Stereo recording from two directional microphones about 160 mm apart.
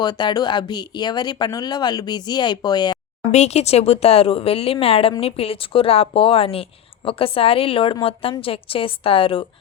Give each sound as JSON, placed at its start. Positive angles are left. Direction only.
{"t": 0.0, "sound": "speech", "side_deg": 25}
{"t": 3.3, "sound": "a woman's voice", "side_deg": 40}